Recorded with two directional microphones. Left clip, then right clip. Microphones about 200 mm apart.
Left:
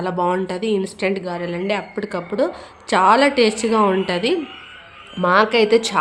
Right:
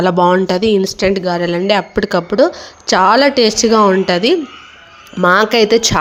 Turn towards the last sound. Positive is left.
turn(degrees=-25)  # may be behind; listen again after turning